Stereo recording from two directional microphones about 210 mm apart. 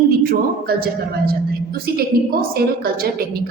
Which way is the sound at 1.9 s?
45° right (ahead or behind).